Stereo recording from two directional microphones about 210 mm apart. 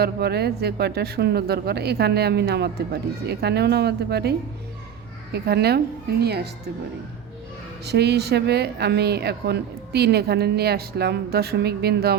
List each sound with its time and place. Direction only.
0.0 s speech: 50° right (ahead or behind)
7.9 s speech: 50° right (ahead or behind)